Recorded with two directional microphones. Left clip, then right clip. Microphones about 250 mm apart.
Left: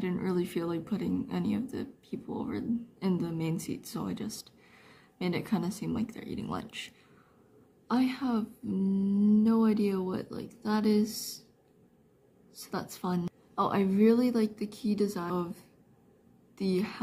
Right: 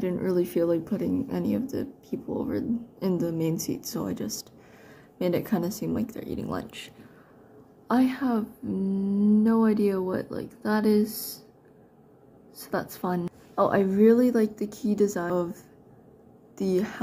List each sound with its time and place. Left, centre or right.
0.0 s speech: centre
7.9 s speech: centre
12.5 s speech: centre
16.7 s speech: centre